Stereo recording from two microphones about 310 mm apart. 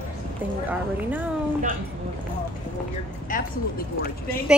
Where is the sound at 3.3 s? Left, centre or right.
Left.